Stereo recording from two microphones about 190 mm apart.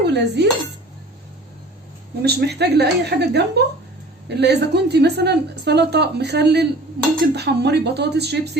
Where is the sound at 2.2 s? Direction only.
60° right (ahead or behind).